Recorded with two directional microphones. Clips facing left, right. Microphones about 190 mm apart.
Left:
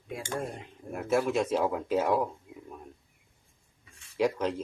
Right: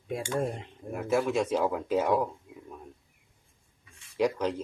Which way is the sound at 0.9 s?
Centre (ahead or behind).